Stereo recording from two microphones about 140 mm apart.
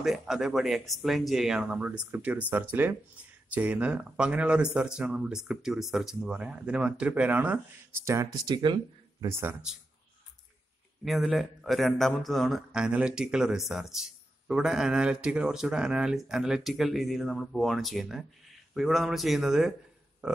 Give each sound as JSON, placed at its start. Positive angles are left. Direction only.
{"t": 0.0, "sound": "a man's voice", "side_deg": 0}
{"t": 8.0, "sound": "speech", "side_deg": -20}
{"t": 9.2, "sound": "speech", "side_deg": -20}
{"t": 11.1, "sound": "a man's voice", "side_deg": 0}